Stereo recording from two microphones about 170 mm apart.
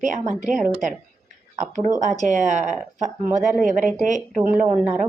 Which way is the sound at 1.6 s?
45° right (ahead or behind).